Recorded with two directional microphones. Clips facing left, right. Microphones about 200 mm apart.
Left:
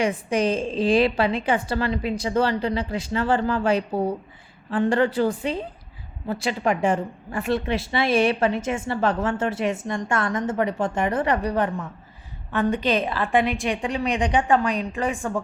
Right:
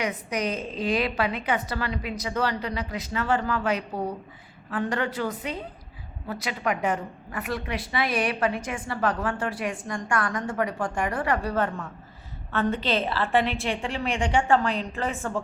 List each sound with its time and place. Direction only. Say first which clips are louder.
0.0 s a woman's voice: left 6 dB; 30° left (ahead or behind)